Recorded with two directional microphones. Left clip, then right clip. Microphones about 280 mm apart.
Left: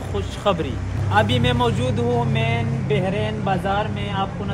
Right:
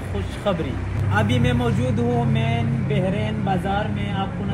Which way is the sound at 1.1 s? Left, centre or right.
Left.